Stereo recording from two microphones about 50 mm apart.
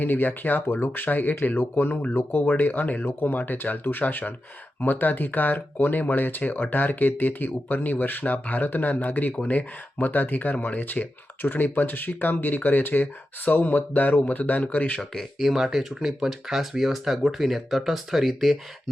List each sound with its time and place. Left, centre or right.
0.0 s speech: left
15.4 s speech: centre